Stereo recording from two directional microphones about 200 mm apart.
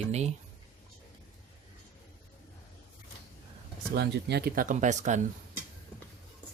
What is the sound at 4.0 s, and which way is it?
Speech, 55° right (ahead or behind).